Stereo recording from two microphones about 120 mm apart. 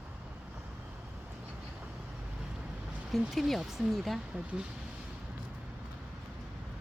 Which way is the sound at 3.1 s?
Centre (ahead or behind).